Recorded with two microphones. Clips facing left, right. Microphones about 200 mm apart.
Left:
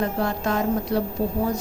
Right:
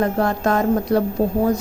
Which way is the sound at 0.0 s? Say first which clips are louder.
Right 5 dB; 50° right (ahead or behind).